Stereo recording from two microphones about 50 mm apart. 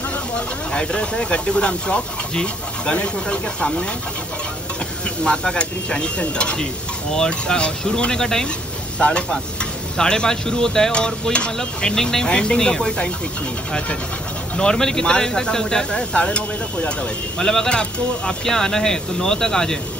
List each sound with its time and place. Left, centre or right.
0.7 s speech: centre
5.0 s speech: centre
14.6 s speech: centre